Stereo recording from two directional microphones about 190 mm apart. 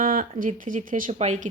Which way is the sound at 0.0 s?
45° right (ahead or behind).